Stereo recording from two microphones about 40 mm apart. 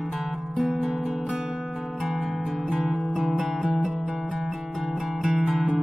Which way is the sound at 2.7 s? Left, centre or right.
Centre.